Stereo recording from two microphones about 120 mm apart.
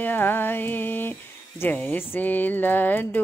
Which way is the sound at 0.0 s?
15° left (ahead or behind).